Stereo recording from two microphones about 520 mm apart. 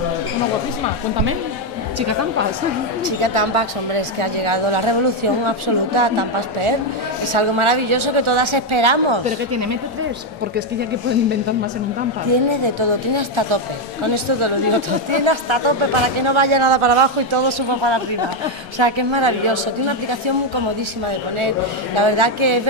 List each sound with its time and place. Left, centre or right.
2.0 s a woman's voice: right
3.1 s a man's voice: right
9.5 s speech: right
12.3 s a man's voice: right
21.9 s a man's voice: right